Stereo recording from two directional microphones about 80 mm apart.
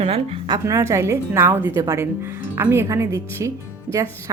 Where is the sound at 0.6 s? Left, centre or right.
Right.